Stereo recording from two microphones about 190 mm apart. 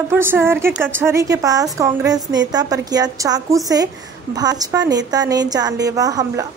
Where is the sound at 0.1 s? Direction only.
10° right (ahead or behind).